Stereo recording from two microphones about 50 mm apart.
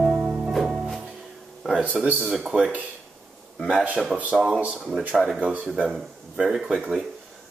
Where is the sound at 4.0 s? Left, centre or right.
Centre.